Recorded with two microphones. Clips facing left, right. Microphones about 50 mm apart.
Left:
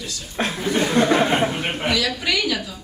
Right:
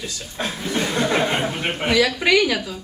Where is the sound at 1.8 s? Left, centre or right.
Right.